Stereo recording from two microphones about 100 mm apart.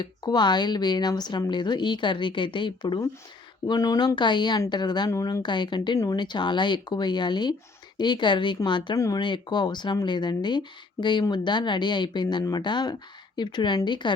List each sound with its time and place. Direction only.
0.0 s speech: 45° left (ahead or behind)
9.0 s speech: 35° left (ahead or behind)
9.2 s speech: 50° left (ahead or behind)